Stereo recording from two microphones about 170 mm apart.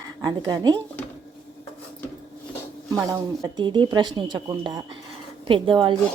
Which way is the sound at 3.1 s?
25° right (ahead or behind).